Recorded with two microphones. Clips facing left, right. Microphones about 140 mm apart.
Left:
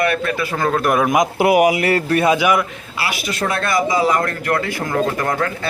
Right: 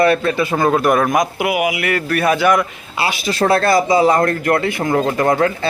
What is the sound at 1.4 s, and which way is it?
Speech, 40° left (ahead or behind).